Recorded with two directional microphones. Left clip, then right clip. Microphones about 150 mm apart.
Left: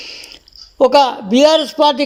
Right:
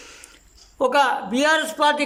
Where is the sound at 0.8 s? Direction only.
25° left (ahead or behind).